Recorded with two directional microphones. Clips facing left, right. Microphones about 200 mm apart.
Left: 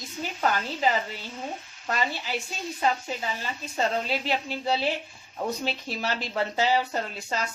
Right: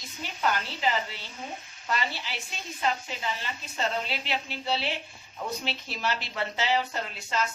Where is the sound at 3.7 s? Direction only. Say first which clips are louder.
Left 4 dB; 40° left (ahead or behind).